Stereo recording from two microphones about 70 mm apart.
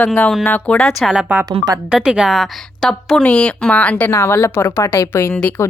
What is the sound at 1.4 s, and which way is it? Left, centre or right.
Speech, right.